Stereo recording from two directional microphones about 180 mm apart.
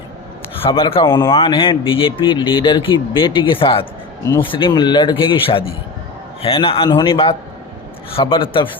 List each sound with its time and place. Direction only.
0.6 s speech: 30° left (ahead or behind)